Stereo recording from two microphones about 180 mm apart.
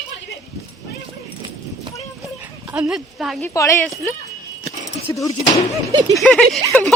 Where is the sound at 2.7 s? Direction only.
5° right (ahead or behind).